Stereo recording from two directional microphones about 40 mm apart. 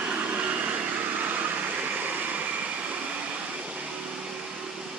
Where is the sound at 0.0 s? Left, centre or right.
Right.